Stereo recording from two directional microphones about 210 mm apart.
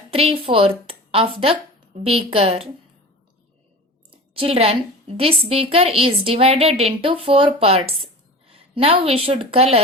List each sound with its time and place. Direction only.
0.1 s a woman's voice: 25° right (ahead or behind)
4.1 s a woman's voice: 25° right (ahead or behind)